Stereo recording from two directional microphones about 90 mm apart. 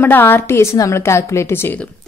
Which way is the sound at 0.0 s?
20° left (ahead or behind).